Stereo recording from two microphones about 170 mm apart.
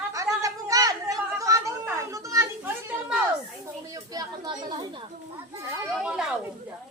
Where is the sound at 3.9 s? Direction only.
20° right (ahead or behind).